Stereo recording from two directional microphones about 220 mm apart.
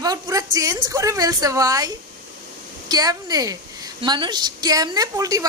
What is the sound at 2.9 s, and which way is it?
Speech, 15° right (ahead or behind).